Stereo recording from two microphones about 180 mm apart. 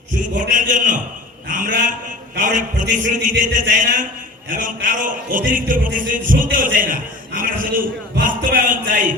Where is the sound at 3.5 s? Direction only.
50° right (ahead or behind).